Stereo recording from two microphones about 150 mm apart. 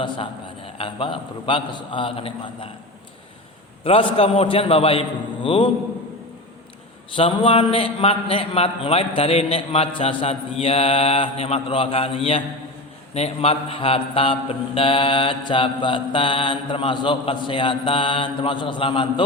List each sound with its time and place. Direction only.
0.0 s a man's voice: 35° left (ahead or behind)
3.8 s a man's voice: 40° left (ahead or behind)
7.2 s a man's voice: 40° left (ahead or behind)